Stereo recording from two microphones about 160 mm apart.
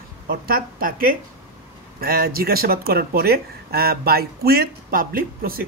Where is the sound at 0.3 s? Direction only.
70° right (ahead or behind).